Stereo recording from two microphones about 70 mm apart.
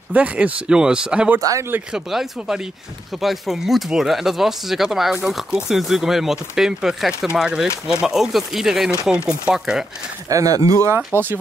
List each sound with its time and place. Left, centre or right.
0.1 s speech: centre
10.3 s speech: right
11.1 s speech: right